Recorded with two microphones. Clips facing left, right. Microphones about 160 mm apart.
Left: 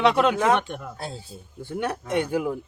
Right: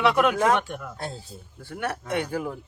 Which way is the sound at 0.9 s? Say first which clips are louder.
Even; centre (ahead or behind).